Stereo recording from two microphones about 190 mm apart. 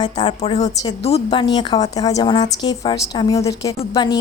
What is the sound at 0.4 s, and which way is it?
A woman's voice, 35° left (ahead or behind).